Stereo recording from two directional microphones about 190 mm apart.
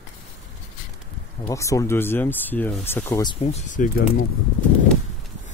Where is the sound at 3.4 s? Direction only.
35° left (ahead or behind).